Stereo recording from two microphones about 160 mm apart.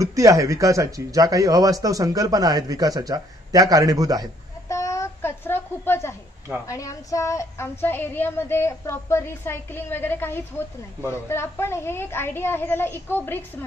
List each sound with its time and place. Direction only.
0.0 s speech: 20° right (ahead or behind)
4.6 s a sound: 20° left (ahead or behind)
6.7 s a woman's voice: 20° left (ahead or behind)